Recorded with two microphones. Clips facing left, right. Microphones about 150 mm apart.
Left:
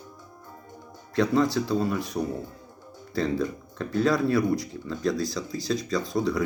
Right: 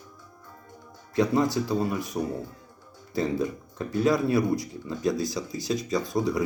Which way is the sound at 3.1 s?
15° right (ahead or behind).